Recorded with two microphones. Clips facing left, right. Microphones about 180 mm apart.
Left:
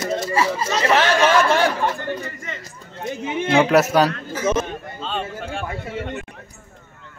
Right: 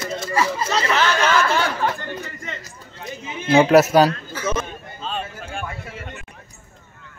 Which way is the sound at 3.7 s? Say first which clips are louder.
Right 4 dB; 5° right (ahead or behind).